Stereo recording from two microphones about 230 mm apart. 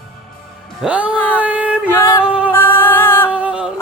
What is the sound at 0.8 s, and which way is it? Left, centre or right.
Music, centre.